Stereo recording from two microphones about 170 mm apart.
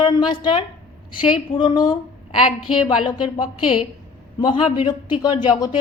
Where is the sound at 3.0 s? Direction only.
30° left (ahead or behind).